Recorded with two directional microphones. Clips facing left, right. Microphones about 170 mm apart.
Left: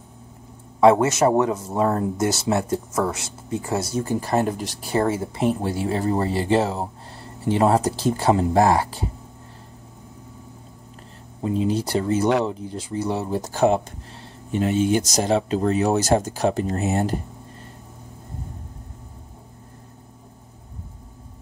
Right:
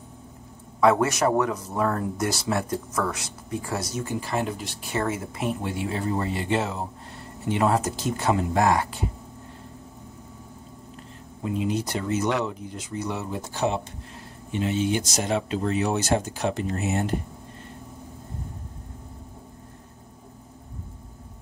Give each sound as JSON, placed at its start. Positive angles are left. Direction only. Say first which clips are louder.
{"t": 0.7, "sound": "speech", "louder": "left 5 dB", "side_deg": 25}
{"t": 11.4, "sound": "speech", "louder": "left 4 dB", "side_deg": 30}